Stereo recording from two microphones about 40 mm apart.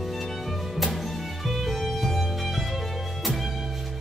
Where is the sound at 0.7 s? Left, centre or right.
Centre.